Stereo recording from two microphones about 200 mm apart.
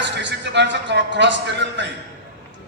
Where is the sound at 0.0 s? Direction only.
60° right (ahead or behind).